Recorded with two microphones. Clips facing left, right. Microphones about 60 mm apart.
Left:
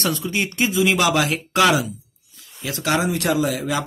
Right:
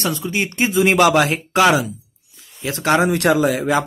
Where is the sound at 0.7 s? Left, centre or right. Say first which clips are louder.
Right 5 dB; right.